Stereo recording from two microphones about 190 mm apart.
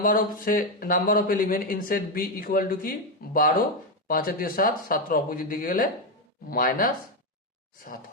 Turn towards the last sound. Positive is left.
turn(degrees=50)  # may be behind; listen again after turning